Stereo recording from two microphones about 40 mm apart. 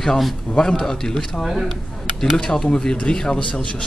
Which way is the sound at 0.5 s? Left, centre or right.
Centre.